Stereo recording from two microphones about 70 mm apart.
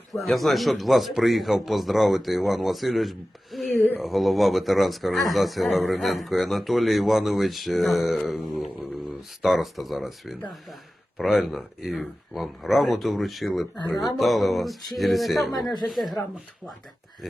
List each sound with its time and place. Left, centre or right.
0.1 s speech: centre
3.8 s speech: left
4.0 s speech: centre